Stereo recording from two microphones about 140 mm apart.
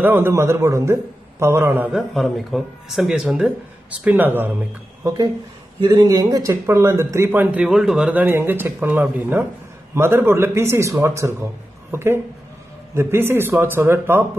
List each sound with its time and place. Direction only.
0.0 s speech: 15° right (ahead or behind)
2.0 s speech: centre (ahead or behind)
5.0 s speech: 25° right (ahead or behind)
7.6 s speech: 5° right (ahead or behind)